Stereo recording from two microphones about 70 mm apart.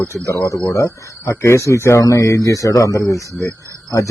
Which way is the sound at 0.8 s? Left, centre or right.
Left.